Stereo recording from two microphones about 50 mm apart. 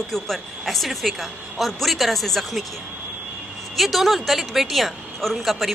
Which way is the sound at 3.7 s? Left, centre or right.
Centre.